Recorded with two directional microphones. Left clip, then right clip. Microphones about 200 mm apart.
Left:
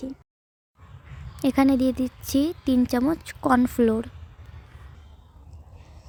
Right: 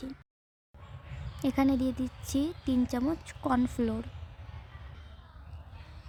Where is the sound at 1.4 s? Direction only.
25° left (ahead or behind).